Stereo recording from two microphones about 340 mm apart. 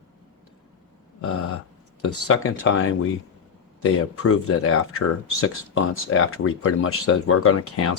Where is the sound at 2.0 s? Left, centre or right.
Left.